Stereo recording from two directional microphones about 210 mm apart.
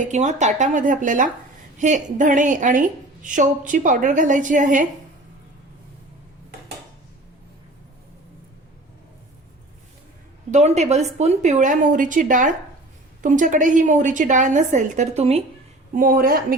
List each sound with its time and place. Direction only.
0.0 s a woman's voice: 35° right (ahead or behind)
10.5 s a woman's voice: 30° right (ahead or behind)
16.0 s speech: 45° right (ahead or behind)